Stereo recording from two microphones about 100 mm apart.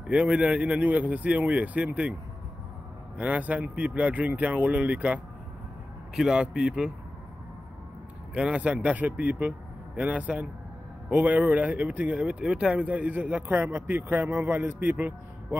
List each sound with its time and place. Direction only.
0.0 s speech: 10° right (ahead or behind)
3.2 s speech: 15° right (ahead or behind)
8.4 s speech: 10° right (ahead or behind)